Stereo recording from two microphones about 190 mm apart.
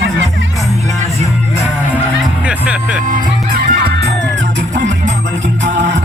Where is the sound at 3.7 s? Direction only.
55° right (ahead or behind).